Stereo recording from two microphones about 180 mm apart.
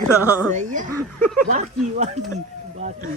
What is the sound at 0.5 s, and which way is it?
Speech, 45° right (ahead or behind).